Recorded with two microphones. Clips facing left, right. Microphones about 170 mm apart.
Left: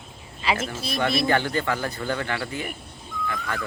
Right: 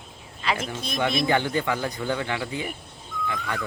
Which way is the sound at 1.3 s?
15° right (ahead or behind).